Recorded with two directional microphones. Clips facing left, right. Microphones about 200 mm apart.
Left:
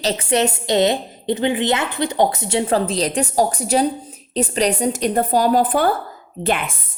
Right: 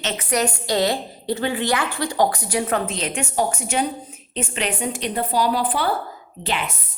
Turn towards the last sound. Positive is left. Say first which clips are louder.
# left 5 dB
turn(degrees=50)  # may be behind; listen again after turning